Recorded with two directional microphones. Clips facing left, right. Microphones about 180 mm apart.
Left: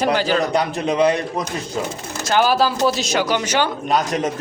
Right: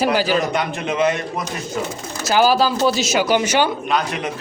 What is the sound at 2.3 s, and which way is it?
A man's voice, centre (ahead or behind).